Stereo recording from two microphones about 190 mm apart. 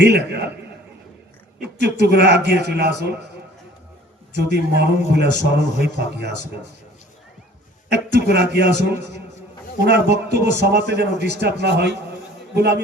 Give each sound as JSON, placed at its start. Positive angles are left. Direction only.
{"t": 0.0, "sound": "a man's voice", "side_deg": -60}
{"t": 1.6, "sound": "a man's voice", "side_deg": -60}
{"t": 4.4, "sound": "a man's voice", "side_deg": -60}
{"t": 7.9, "sound": "a man's voice", "side_deg": -60}